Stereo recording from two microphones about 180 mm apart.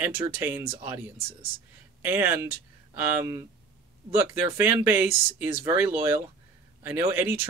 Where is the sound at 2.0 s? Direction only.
10° right (ahead or behind).